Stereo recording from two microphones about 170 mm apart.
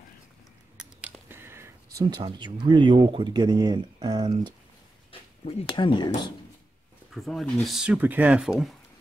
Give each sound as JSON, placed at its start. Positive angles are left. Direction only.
{"t": 1.3, "sound": "a sound", "side_deg": -15}
{"t": 2.0, "sound": "speech", "side_deg": -25}
{"t": 5.1, "sound": "speech", "side_deg": 30}
{"t": 7.2, "sound": "speech", "side_deg": 0}